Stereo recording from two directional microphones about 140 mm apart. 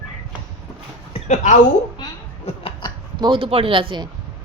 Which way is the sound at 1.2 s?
60° left (ahead or behind).